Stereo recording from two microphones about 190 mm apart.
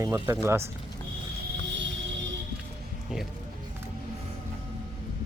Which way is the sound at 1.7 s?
70° right (ahead or behind).